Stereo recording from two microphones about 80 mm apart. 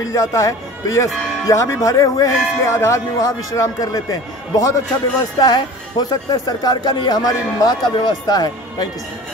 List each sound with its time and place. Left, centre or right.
0.1 s speech: left